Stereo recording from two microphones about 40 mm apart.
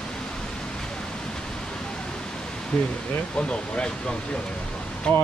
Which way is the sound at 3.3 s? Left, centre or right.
Left.